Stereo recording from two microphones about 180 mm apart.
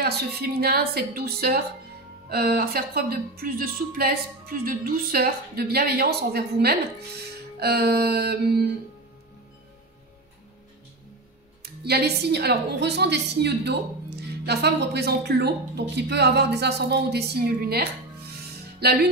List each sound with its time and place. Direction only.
0.0 s a woman's voice: 60° right (ahead or behind)
11.6 s a woman's voice: 65° right (ahead or behind)